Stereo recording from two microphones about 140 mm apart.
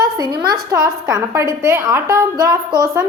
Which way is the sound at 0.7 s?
20° right (ahead or behind).